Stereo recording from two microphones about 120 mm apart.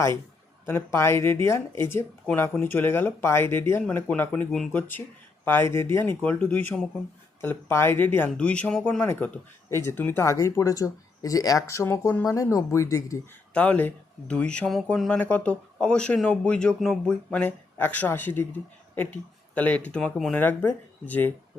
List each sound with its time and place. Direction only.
0.6 s speech: 20° left (ahead or behind)
13.5 s speech: 10° left (ahead or behind)
20.3 s speech: 15° left (ahead or behind)